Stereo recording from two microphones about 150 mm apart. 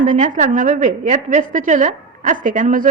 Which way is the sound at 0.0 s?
55° right (ahead or behind).